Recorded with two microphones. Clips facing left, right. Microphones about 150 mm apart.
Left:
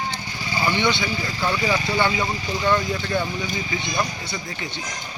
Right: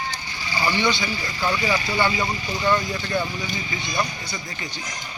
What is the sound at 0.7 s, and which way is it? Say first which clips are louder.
Speech: left 1 dB; 25° left (ahead or behind).